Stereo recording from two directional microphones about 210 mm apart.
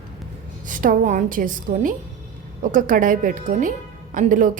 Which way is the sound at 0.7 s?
40° right (ahead or behind).